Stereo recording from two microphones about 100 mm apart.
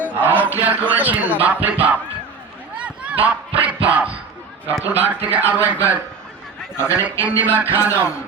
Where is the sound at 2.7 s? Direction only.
10° right (ahead or behind).